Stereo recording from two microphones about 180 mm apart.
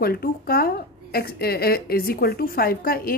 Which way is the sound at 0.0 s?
55° left (ahead or behind).